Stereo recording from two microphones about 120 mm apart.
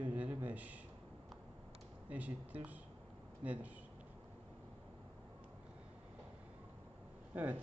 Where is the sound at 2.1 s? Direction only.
15° right (ahead or behind).